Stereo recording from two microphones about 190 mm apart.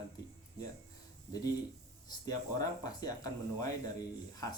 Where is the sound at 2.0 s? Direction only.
20° left (ahead or behind).